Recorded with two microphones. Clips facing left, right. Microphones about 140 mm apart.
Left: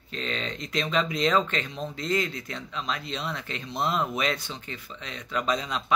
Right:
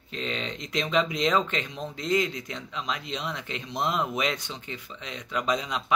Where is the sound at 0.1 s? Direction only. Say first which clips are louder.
Even; 15° right (ahead or behind).